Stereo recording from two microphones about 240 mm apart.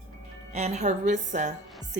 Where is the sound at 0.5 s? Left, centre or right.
Right.